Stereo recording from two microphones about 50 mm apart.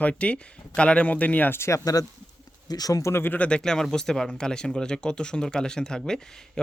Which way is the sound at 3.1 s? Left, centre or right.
Left.